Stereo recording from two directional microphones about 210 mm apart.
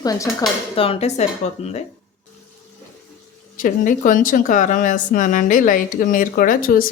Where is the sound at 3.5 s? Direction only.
40° left (ahead or behind).